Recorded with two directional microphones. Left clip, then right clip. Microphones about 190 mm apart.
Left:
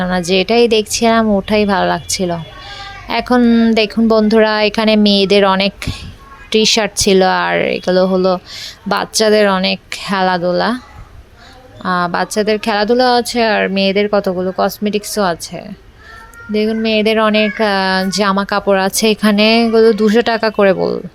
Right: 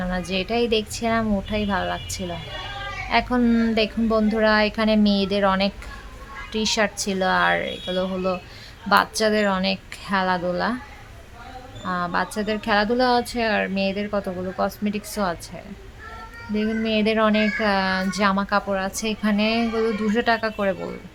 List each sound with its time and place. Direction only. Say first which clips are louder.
0.0 s speech: left 12 dB; 35° left (ahead or behind)
11.8 s speech: left 9 dB; 35° left (ahead or behind)